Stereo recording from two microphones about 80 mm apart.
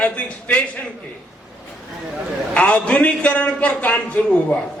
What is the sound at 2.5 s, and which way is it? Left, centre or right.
A man's voice, centre.